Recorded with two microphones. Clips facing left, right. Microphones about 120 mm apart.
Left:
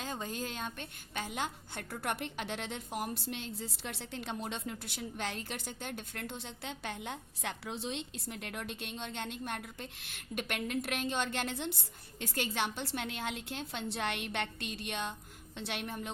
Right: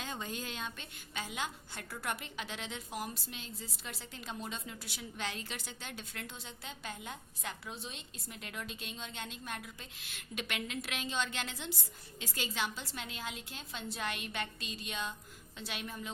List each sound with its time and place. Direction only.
0.0 s a woman's voice: 40° left (ahead or behind); by 16.1 s 65° left (ahead or behind)